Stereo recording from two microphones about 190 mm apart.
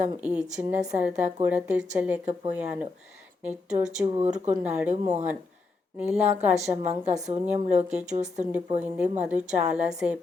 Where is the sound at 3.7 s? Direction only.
40° right (ahead or behind).